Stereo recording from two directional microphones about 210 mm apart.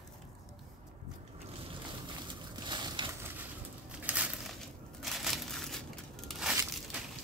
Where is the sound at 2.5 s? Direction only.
20° right (ahead or behind).